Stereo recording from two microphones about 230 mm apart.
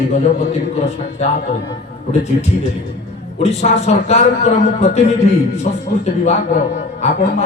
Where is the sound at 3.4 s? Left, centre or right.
Left.